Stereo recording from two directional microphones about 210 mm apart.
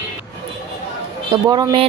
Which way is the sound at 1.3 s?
20° right (ahead or behind).